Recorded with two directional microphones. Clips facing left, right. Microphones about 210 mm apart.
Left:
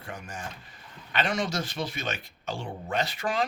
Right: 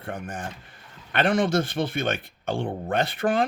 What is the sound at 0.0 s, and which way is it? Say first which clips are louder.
Speech: right 6 dB; 55° right (ahead or behind).